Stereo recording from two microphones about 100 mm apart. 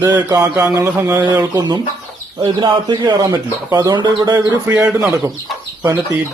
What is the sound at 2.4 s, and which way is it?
Speech, 50° right (ahead or behind).